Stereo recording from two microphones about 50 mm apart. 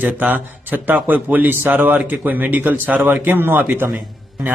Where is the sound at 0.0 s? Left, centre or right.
Right.